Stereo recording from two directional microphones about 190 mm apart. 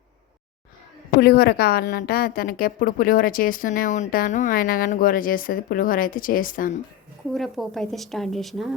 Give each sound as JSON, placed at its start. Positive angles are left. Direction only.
{"t": 1.2, "sound": "a woman's voice", "side_deg": 60}
{"t": 7.3, "sound": "a woman's voice", "side_deg": 0}